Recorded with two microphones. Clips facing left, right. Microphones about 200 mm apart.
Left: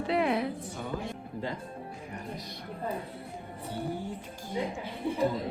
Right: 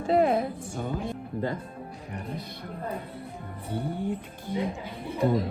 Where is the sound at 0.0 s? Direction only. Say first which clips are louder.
Right 5 dB; 45° right (ahead or behind).